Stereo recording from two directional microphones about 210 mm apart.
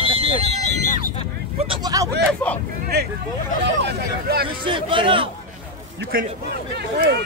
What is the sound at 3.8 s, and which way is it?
Speech, 50° right (ahead or behind).